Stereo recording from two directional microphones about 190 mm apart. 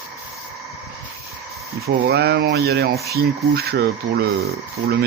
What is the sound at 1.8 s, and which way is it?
Speech, 60° right (ahead or behind).